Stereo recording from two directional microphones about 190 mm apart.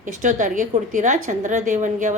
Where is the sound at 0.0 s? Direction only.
40° right (ahead or behind).